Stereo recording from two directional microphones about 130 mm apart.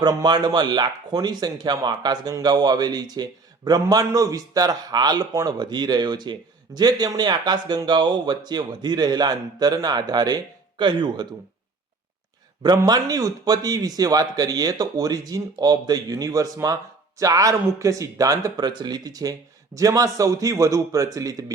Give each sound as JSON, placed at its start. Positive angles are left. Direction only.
{"t": 0.0, "sound": "speech", "side_deg": -30}
{"t": 12.6, "sound": "speech", "side_deg": -30}